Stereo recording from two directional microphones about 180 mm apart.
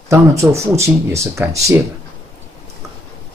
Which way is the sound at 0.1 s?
15° right (ahead or behind).